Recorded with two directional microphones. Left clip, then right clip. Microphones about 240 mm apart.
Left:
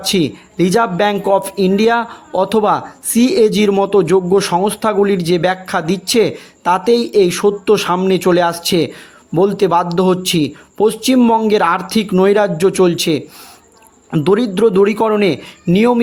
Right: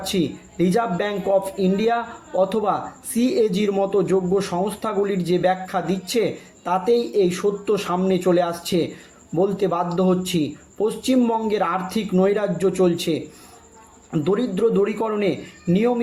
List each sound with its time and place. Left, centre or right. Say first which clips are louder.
0.0 s speech: left 8 dB; left